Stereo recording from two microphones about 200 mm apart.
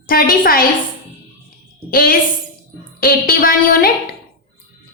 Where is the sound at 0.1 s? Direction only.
45° left (ahead or behind).